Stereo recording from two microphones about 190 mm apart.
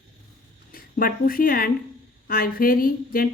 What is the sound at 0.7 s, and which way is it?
A woman's voice, 50° left (ahead or behind).